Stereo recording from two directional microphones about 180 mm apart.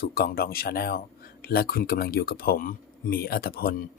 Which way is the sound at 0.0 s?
55° left (ahead or behind).